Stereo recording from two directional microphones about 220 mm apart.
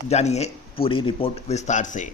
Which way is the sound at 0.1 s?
30° left (ahead or behind).